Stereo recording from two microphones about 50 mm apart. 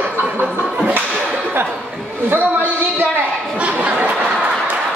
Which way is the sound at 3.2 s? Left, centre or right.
Right.